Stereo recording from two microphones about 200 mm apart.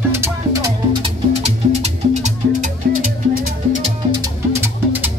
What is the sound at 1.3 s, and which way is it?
Music, 30° right (ahead or behind).